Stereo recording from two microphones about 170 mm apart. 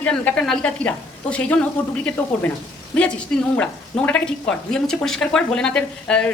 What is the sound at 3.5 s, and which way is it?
A woman's voice, 10° left (ahead or behind).